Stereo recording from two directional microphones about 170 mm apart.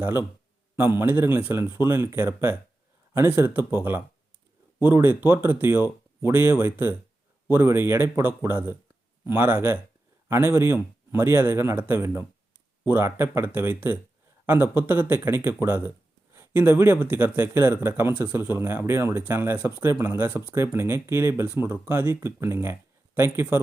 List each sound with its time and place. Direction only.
0.0 s speech: 15° right (ahead or behind)